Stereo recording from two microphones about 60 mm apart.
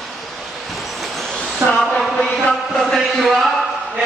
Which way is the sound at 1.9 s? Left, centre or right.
Centre.